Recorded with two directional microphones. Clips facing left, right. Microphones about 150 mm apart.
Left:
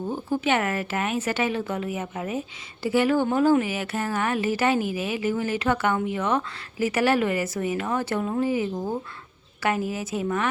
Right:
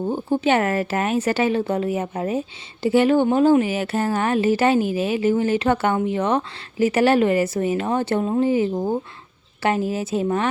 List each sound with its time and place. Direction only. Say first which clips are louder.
0.1 s a woman's voice: right 4 dB; 25° right (ahead or behind)